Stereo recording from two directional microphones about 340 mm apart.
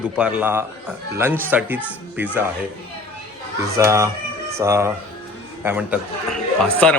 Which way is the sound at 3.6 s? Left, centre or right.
Centre.